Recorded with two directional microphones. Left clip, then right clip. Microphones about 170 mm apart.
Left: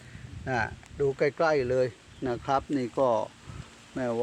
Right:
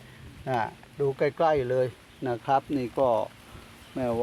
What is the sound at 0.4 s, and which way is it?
Speech, 10° left (ahead or behind).